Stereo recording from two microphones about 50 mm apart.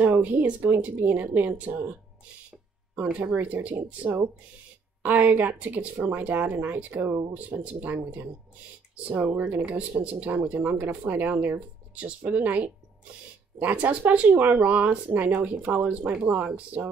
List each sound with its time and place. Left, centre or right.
0.0 s speech: right
3.6 s speech: right
7.3 s speech: right
9.2 s speech: right